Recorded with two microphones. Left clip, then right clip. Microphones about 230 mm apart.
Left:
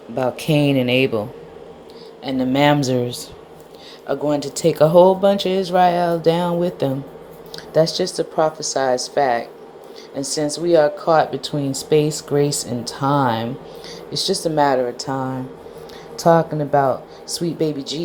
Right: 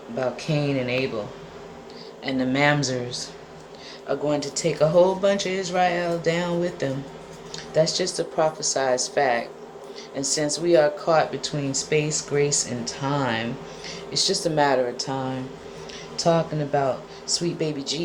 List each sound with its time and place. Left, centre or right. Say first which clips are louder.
0.2 s speech: left 7 dB; left
2.2 s speech: left 5 dB; left
4.0 s speech: left 4 dB; left